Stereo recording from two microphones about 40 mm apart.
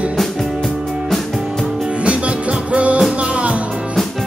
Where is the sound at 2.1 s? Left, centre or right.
Right.